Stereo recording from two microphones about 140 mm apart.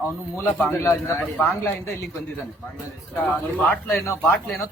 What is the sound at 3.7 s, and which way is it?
Speech, 15° left (ahead or behind).